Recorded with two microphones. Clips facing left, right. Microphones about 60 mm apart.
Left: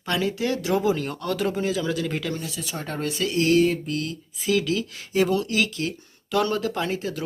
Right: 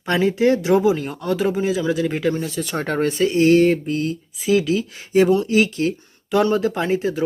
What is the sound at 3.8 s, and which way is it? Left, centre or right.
Speech, right.